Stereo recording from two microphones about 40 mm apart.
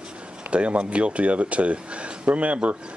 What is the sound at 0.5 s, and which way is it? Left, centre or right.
Speech, right.